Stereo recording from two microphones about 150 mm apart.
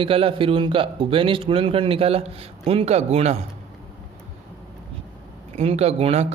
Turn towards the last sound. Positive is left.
turn(degrees=-45)  # may be behind; listen again after turning